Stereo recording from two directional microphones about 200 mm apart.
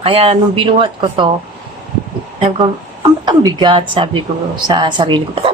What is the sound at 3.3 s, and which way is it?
A woman's voice, 20° right (ahead or behind).